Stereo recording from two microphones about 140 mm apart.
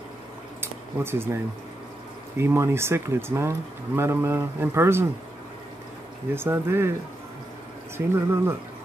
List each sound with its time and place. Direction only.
0.6 s a sound: 15° right (ahead or behind)
2.3 s speech: 20° right (ahead or behind)
6.3 s speech: 15° right (ahead or behind)
8.1 s speech: 20° right (ahead or behind)